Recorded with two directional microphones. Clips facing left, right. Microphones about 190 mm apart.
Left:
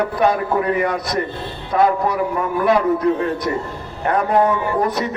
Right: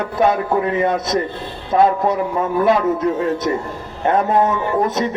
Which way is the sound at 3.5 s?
20° right (ahead or behind).